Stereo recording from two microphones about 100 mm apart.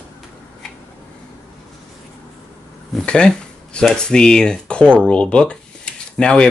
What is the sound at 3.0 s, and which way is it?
Speech, 10° left (ahead or behind).